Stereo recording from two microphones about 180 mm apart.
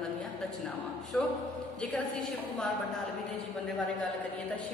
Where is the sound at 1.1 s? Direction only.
5° left (ahead or behind).